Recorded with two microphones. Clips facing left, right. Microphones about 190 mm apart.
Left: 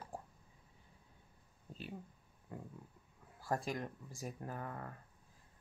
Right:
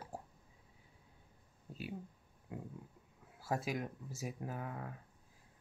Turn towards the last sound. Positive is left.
turn(degrees=-5)  # may be behind; listen again after turning